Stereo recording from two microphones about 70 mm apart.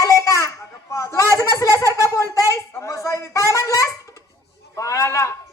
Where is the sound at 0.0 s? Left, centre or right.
Left.